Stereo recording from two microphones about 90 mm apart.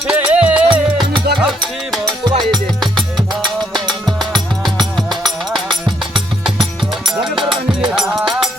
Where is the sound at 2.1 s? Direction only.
50° right (ahead or behind).